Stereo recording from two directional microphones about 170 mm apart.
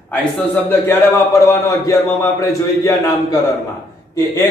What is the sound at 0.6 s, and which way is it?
A man's voice, 10° left (ahead or behind).